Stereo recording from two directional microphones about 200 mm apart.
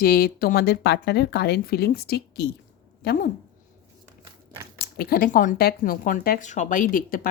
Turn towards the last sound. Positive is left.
turn(degrees=45)  # may be behind; listen again after turning